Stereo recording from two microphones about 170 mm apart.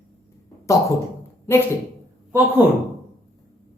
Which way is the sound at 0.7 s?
20° left (ahead or behind).